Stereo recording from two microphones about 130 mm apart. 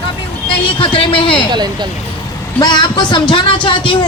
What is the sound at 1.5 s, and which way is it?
Speech, 35° right (ahead or behind).